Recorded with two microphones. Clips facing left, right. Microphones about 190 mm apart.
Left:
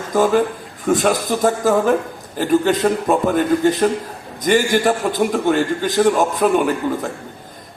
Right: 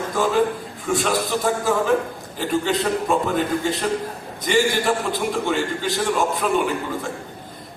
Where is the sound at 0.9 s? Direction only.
45° left (ahead or behind).